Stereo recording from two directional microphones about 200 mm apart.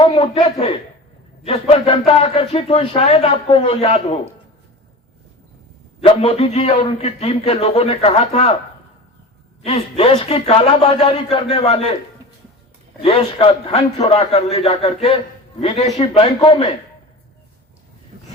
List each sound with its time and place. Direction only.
0.0 s a man's voice: 25° left (ahead or behind)
6.0 s a man's voice: 30° left (ahead or behind)
9.6 s speech: 30° left (ahead or behind)
13.0 s a man's voice: 30° left (ahead or behind)